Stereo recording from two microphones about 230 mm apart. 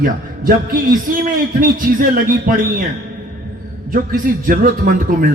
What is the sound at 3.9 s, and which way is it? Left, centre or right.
A man's voice, right.